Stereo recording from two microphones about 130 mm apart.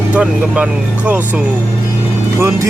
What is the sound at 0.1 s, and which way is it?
Speech, 10° right (ahead or behind).